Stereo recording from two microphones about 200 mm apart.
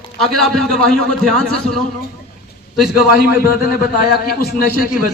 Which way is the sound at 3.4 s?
45° left (ahead or behind).